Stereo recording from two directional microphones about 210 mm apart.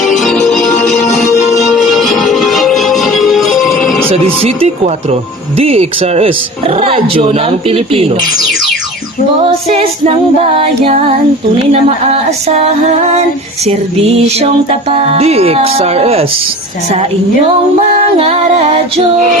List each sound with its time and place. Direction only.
0.0 s music: centre (ahead or behind)
4.1 s speech: 30° right (ahead or behind)
13.7 s speech: 30° right (ahead or behind)
18.2 s speech: 30° right (ahead or behind)